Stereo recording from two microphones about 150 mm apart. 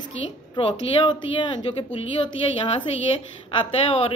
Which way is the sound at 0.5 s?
35° left (ahead or behind).